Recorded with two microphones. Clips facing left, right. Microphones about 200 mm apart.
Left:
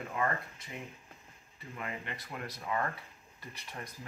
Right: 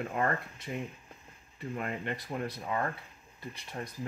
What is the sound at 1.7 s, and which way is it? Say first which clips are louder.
Speech: right 5 dB; 50° right (ahead or behind).